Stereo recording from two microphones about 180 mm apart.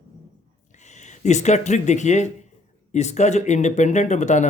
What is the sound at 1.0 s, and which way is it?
Speech, 40° left (ahead or behind).